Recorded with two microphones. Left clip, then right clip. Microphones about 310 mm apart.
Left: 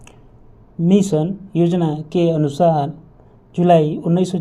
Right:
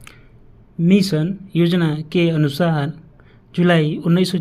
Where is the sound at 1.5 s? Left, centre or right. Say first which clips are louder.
Even; right.